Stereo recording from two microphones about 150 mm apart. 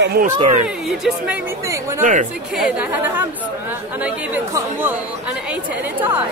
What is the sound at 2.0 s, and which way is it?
Speech, 55° right (ahead or behind).